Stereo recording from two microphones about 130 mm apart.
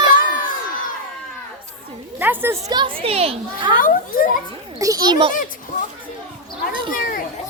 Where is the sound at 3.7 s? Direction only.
90° left.